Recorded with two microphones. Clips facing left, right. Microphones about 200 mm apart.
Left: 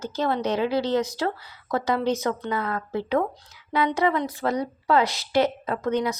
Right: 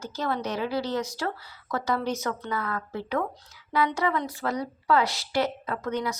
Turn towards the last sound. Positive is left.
turn(degrees=20)  # may be behind; listen again after turning